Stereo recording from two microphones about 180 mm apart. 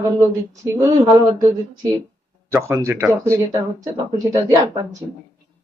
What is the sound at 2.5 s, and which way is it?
A man's voice, 15° right (ahead or behind).